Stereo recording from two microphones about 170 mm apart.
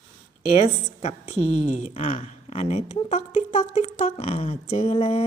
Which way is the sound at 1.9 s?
35° left (ahead or behind).